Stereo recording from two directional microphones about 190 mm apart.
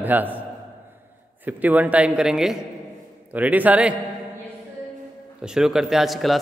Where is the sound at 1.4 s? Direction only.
10° right (ahead or behind).